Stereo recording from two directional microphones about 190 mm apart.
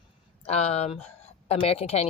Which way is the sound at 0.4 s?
35° left (ahead or behind).